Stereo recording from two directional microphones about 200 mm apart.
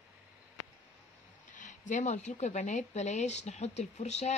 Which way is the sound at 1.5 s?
40° left (ahead or behind).